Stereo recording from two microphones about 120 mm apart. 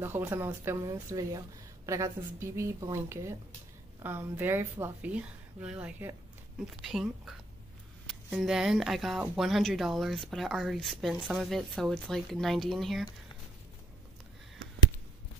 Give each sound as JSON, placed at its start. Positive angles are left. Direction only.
{"t": 0.0, "sound": "a woman's voice", "side_deg": -20}
{"t": 11.1, "sound": "a woman's voice", "side_deg": -10}
{"t": 11.4, "sound": "speech", "side_deg": 0}